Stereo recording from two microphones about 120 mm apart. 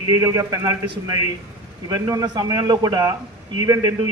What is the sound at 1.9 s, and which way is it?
A man's voice, 30° right (ahead or behind).